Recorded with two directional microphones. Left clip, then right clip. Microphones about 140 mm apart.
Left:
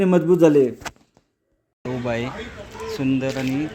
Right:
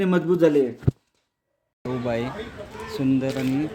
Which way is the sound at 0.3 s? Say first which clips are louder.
Left 3 dB; 30° left (ahead or behind).